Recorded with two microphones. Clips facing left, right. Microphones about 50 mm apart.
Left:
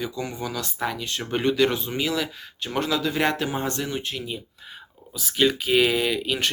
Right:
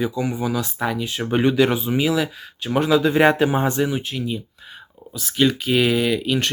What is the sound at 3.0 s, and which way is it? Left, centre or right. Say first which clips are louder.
Speech: right 8 dB; right.